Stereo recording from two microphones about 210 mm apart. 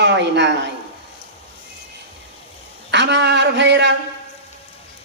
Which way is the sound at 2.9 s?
55° right (ahead or behind).